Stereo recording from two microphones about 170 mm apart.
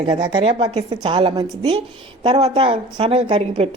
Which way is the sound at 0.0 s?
25° right (ahead or behind).